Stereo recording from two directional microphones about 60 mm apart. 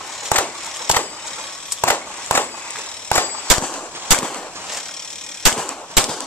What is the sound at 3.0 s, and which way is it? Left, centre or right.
Fireworks, left.